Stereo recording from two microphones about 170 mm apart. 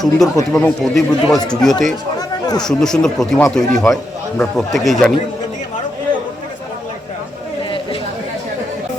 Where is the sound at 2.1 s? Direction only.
25° left (ahead or behind).